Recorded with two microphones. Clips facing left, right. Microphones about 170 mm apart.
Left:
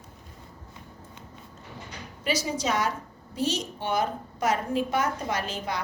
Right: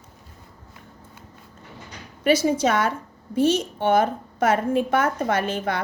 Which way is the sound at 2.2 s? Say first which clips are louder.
Right 9 dB; 55° right (ahead or behind).